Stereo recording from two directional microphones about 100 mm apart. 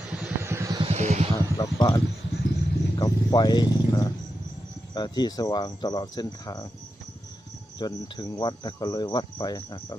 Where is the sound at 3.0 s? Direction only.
40° left (ahead or behind).